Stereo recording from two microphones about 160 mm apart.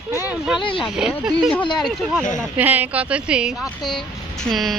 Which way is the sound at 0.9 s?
5° right (ahead or behind).